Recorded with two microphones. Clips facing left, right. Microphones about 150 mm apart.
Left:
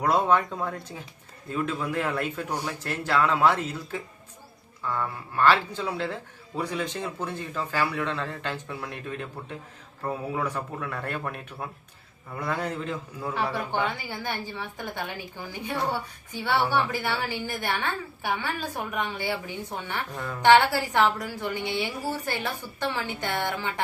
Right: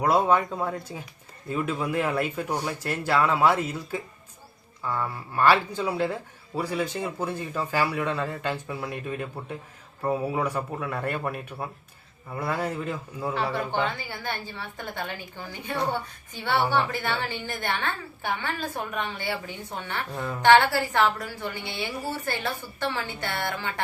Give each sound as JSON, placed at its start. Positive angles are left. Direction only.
{"t": 0.0, "sound": "a man's voice", "side_deg": -10}
{"t": 13.5, "sound": "a woman's voice", "side_deg": 15}
{"t": 20.1, "sound": "a man's voice", "side_deg": -15}
{"t": 20.4, "sound": "a woman's voice", "side_deg": 15}